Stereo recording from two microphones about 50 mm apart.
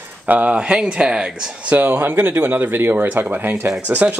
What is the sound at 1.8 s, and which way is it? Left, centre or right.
Speech, right.